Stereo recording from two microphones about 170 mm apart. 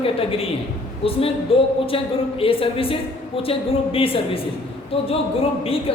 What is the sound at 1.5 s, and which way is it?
A woman's voice, 35° left (ahead or behind).